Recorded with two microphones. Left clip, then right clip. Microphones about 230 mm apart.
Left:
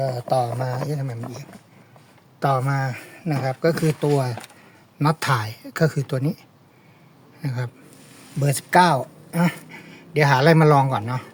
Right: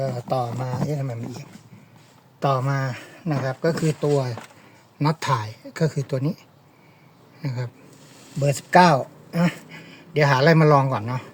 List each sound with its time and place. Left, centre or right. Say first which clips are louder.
0.0 s speech: left 3 dB; left
7.4 s speech: left 2 dB; left